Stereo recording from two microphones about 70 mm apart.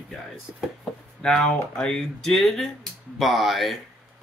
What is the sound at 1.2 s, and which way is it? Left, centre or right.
Speech, centre.